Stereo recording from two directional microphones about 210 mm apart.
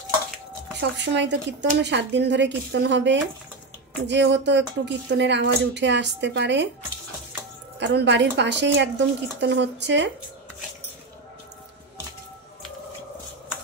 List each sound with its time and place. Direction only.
0.7 s speech: 55° right (ahead or behind)
7.8 s speech: 55° right (ahead or behind)